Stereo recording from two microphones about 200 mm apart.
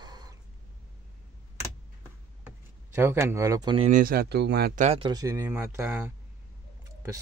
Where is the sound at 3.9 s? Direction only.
50° right (ahead or behind).